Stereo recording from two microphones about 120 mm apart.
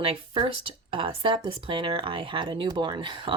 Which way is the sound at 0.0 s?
50° right (ahead or behind).